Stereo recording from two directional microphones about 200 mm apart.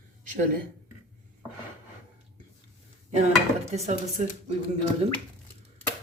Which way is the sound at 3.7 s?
35° right (ahead or behind).